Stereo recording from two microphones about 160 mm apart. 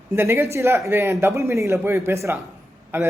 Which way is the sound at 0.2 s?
15° right (ahead or behind).